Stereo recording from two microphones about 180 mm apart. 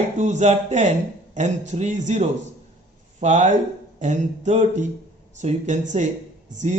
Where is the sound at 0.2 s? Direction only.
40° right (ahead or behind).